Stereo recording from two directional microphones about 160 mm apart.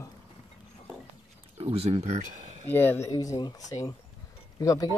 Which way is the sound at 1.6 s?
40° right (ahead or behind).